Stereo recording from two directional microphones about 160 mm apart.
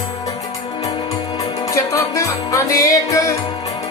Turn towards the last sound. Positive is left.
turn(degrees=20)  # may be behind; listen again after turning